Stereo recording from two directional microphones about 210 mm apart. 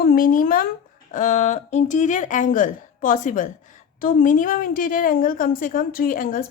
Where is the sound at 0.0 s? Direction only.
40° left (ahead or behind).